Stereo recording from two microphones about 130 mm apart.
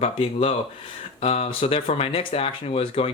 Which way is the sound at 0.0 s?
50° left (ahead or behind).